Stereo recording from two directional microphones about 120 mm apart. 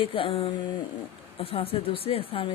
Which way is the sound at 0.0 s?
45° left (ahead or behind).